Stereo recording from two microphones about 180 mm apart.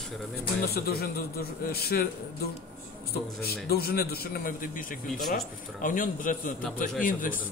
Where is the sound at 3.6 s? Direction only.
60° left (ahead or behind).